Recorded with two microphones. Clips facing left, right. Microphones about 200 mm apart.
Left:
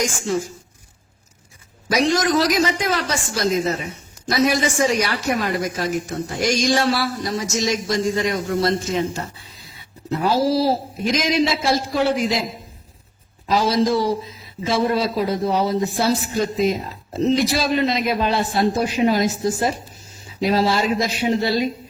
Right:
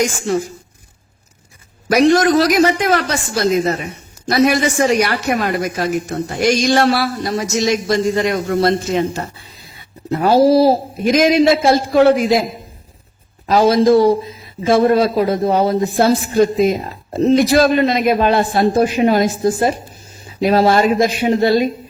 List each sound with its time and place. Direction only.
0.0 s speech: 60° right (ahead or behind)
1.9 s speech: 60° right (ahead or behind)
13.5 s a man's voice: 55° right (ahead or behind)